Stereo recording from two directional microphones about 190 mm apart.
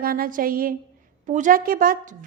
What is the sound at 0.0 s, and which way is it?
A woman's voice, 50° right (ahead or behind).